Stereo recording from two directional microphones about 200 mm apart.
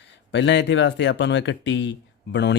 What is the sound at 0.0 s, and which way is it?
Speech, 60° left (ahead or behind).